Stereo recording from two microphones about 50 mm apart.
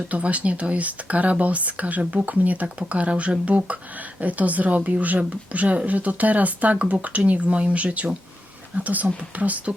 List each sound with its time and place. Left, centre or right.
0.1 s speech: right